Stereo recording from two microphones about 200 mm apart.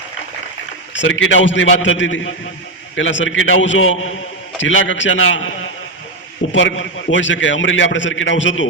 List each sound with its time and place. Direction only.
0.9 s a man's voice: 70° left (ahead or behind)
6.5 s a man's voice: 75° left (ahead or behind)